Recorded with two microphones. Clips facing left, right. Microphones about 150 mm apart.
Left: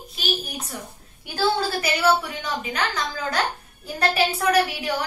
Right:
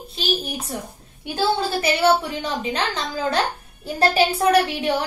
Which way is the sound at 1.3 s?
25° right (ahead or behind).